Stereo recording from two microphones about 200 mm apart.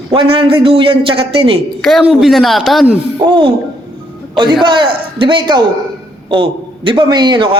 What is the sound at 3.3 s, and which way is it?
Speech, 25° right (ahead or behind).